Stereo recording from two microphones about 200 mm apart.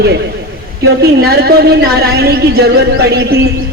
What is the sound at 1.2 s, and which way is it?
A man's voice, 50° right (ahead or behind).